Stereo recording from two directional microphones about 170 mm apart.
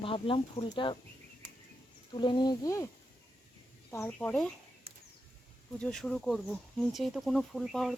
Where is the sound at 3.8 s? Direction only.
10° left (ahead or behind).